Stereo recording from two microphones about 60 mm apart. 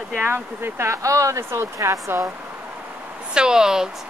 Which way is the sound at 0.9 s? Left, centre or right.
Right.